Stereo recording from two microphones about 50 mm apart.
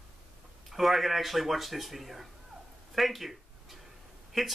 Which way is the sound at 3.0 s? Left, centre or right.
Centre.